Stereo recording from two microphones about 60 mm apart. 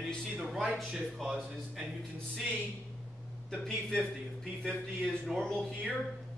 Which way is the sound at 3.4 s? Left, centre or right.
Centre.